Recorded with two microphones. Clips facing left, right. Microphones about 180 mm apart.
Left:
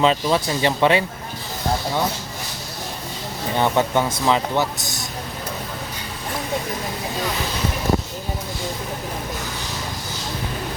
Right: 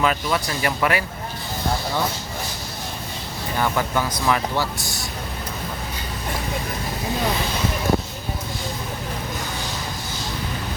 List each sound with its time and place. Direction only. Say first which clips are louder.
0.0 s speech: left 4 dB; 25° left (ahead or behind)
3.5 s speech: left 4 dB; 25° left (ahead or behind)